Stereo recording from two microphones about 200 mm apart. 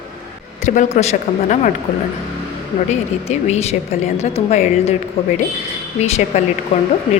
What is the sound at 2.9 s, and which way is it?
A woman's voice, 30° left (ahead or behind).